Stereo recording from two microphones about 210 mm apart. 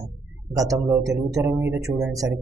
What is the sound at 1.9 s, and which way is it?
Speech, centre (ahead or behind).